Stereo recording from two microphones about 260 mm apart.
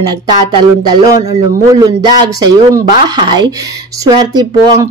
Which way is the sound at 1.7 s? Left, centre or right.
Centre.